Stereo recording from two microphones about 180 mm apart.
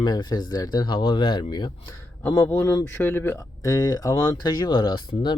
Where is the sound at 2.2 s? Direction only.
10° left (ahead or behind).